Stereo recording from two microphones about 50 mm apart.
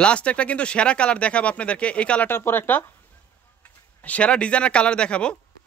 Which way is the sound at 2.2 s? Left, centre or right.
Left.